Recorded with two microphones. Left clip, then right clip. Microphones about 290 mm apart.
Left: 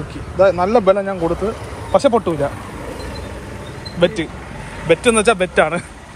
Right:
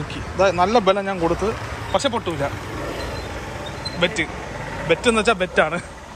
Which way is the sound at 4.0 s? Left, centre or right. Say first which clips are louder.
Left 5 dB; centre.